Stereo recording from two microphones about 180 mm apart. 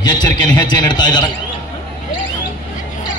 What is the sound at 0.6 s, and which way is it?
Speech, 25° left (ahead or behind).